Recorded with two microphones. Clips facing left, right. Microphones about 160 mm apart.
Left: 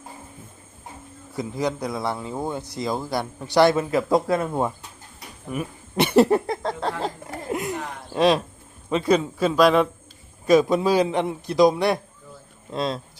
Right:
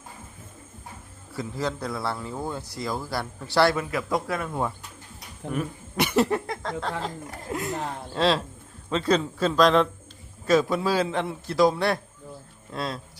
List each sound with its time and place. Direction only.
1.4 s a man's voice: 15° left (ahead or behind)
5.5 s speech: 5° left (ahead or behind)
6.0 s a sound: 30° left (ahead or behind)
8.1 s a man's voice: 15° left (ahead or behind)